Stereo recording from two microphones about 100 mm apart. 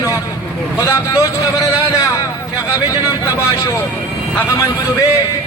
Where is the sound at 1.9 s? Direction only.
35° left (ahead or behind).